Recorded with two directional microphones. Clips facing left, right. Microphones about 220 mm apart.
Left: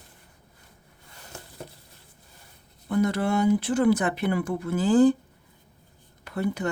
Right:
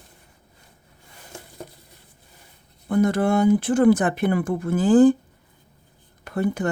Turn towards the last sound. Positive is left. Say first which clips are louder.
# right 4 dB
turn(degrees=-50)  # may be behind; listen again after turning